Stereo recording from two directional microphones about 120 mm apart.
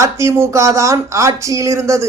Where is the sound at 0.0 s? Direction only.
25° right (ahead or behind).